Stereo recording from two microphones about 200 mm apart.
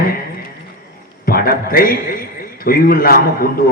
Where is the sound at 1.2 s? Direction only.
50° left (ahead or behind).